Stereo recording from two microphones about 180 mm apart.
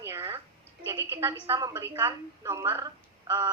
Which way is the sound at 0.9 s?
15° right (ahead or behind).